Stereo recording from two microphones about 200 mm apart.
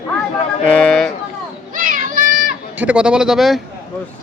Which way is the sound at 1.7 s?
45° right (ahead or behind).